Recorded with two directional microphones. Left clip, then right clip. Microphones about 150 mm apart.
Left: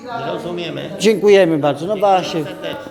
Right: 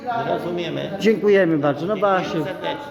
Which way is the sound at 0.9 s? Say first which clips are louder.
Left 5 dB; 30° right (ahead or behind).